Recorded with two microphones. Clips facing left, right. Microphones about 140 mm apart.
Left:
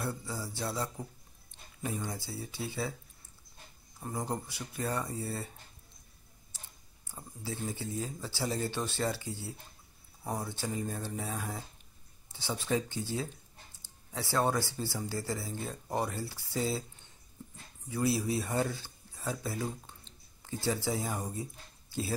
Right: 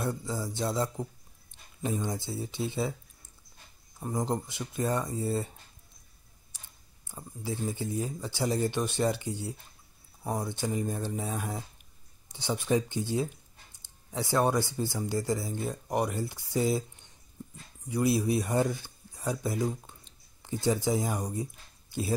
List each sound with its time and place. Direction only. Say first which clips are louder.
0.0 s speech: right 5 dB; 20° right (ahead or behind)
4.0 s speech: right 5 dB; 15° right (ahead or behind)
6.5 s a sound: left 1 dB; 15° right (ahead or behind)
7.1 s speech: right 4 dB; 15° right (ahead or behind)